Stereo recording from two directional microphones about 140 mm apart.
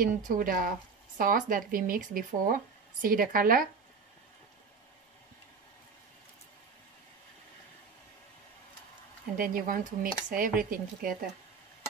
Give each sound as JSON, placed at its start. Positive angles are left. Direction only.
{"t": 0.0, "sound": "speech", "side_deg": -70}
{"t": 9.4, "sound": "speech", "side_deg": -75}
{"t": 10.6, "sound": "speech", "side_deg": -90}